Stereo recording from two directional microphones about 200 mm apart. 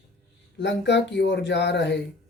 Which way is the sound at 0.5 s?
60° left (ahead or behind).